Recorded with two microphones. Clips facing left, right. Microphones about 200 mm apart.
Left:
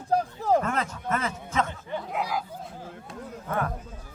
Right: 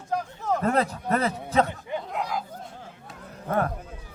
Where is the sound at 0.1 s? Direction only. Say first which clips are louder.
Left 4 dB; 35° left (ahead or behind).